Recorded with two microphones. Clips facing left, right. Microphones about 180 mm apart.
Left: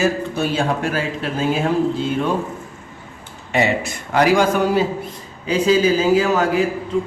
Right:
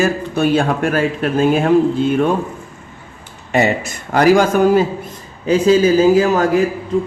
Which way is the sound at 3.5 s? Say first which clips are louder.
Right 3 dB; 45° right (ahead or behind).